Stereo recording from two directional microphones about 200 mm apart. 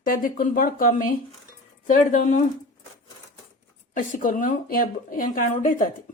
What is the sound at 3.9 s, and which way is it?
Speech, 45° left (ahead or behind).